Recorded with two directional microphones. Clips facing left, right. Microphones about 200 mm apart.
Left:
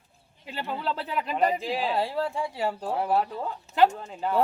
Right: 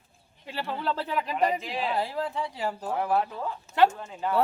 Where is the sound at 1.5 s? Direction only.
35° left (ahead or behind).